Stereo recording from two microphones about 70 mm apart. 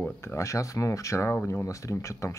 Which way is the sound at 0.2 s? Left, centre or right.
Left.